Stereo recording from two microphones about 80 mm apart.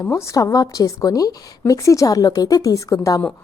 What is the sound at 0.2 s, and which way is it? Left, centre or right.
A woman's voice, left.